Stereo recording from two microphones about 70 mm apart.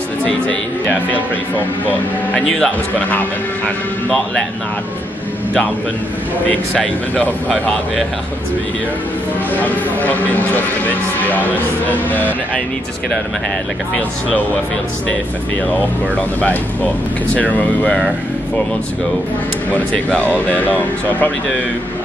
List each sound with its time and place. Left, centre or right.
2.3 s speech: centre
3.0 s speech: left
6.7 s speech: centre
9.6 s speech: left
16.2 s speech: left
19.7 s speech: centre